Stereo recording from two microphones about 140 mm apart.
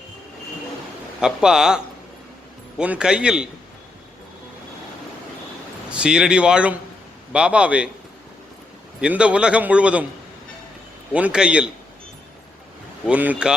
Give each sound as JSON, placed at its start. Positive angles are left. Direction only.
{"t": 1.2, "sound": "a man's voice", "side_deg": -5}
{"t": 5.9, "sound": "a man's voice", "side_deg": -5}
{"t": 9.0, "sound": "a man's voice", "side_deg": -5}
{"t": 11.1, "sound": "a man's voice", "side_deg": -10}
{"t": 13.1, "sound": "a man's voice", "side_deg": -10}